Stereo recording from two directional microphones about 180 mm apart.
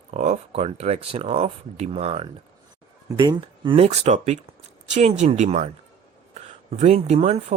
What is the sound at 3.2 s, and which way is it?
Speech, 25° right (ahead or behind).